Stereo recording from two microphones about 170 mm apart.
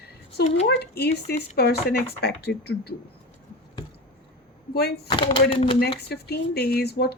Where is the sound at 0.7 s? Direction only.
75° left (ahead or behind).